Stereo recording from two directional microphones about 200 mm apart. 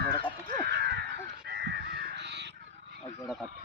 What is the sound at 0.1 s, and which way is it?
Crow, 25° left (ahead or behind).